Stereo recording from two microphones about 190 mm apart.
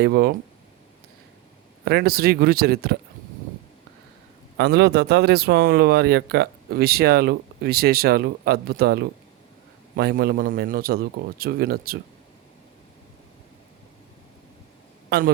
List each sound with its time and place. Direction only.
0.0 s a man's voice: 55° right (ahead or behind)
1.8 s a man's voice: 55° right (ahead or behind)
4.5 s a man's voice: 60° right (ahead or behind)